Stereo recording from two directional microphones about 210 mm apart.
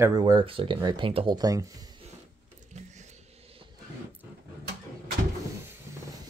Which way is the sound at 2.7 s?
35° right (ahead or behind).